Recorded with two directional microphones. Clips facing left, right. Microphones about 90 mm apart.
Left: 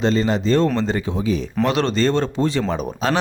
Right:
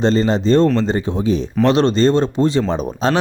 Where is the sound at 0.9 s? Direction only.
35° right (ahead or behind).